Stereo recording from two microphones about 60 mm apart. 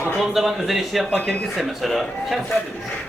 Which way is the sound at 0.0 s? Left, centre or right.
Centre.